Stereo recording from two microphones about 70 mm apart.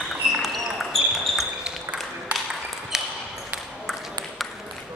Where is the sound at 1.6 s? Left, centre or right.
Centre.